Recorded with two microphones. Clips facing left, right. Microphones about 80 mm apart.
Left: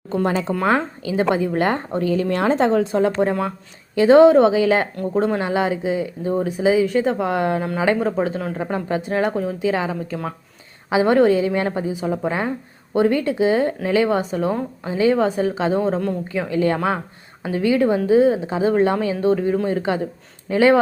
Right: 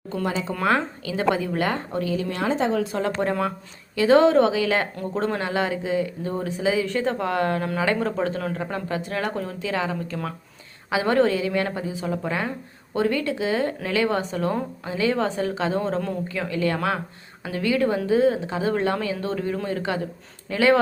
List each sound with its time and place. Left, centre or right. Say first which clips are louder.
0.1 s speech: left 6 dB; left
0.6 s a woman's voice: even; left
2.9 s a woman's voice: left 6 dB; centre
5.1 s a woman's voice: left 5 dB; centre
9.3 s speech: left 6 dB; centre
9.6 s a woman's voice: left 3 dB; centre
14.8 s speech: left 6 dB; left; by 16.1 s centre
16.3 s a woman's voice: left 5 dB; left